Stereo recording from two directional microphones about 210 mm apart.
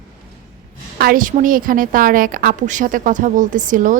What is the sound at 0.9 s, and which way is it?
A woman's voice, 45° right (ahead or behind).